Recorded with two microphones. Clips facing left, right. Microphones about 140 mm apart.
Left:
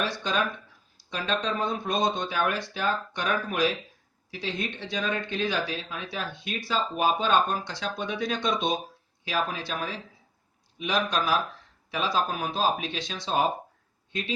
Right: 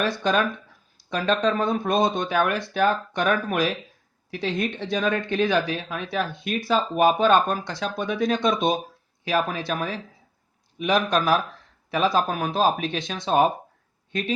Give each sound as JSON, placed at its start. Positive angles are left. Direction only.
{"t": 0.0, "sound": "speech", "side_deg": -45}
{"t": 4.9, "sound": "speech", "side_deg": -60}